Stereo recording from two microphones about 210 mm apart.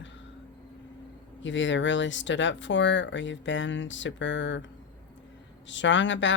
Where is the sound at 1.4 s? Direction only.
60° left (ahead or behind).